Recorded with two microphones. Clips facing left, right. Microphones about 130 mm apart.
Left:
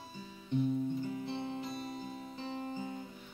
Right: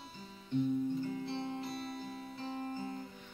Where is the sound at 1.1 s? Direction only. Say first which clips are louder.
Even; 15° left (ahead or behind).